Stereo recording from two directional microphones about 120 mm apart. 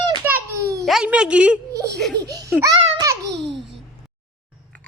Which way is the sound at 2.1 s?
30° right (ahead or behind).